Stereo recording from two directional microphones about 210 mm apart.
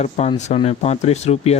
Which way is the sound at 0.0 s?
30° left (ahead or behind).